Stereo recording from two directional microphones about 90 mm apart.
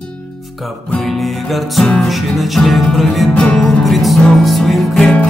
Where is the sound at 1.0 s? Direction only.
Centre (ahead or behind).